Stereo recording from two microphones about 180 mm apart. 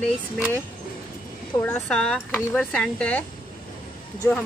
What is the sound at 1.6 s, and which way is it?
Speech, 10° left (ahead or behind).